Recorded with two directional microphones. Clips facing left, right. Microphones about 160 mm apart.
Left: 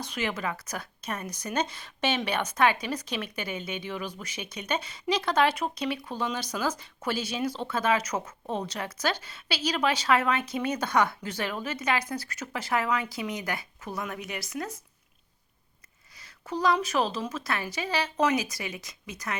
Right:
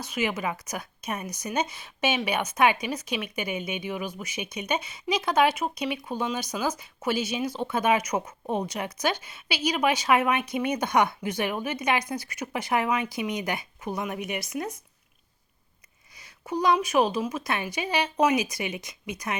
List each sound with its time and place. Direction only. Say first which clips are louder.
0.0 s speech: right 3 dB; 10° right (ahead or behind)
16.1 s speech: right 3 dB; 15° right (ahead or behind)